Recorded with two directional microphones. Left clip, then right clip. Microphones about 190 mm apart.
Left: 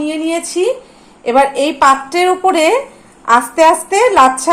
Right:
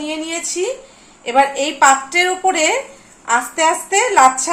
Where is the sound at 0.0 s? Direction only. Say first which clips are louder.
Left 6 dB; 35° left (ahead or behind).